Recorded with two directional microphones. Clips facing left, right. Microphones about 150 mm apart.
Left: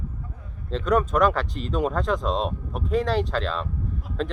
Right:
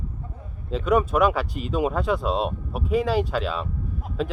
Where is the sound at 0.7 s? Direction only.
5° right (ahead or behind).